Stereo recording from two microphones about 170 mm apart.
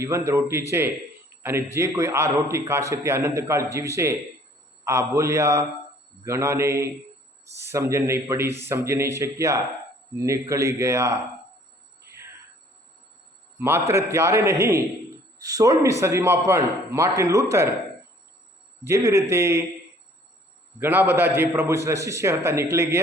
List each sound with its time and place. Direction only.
0.0 s a man's voice: 15° right (ahead or behind)
12.0 s a sound: 15° right (ahead or behind)
13.6 s a man's voice: 15° right (ahead or behind)
18.9 s a man's voice: 15° right (ahead or behind)
20.7 s a man's voice: 10° right (ahead or behind)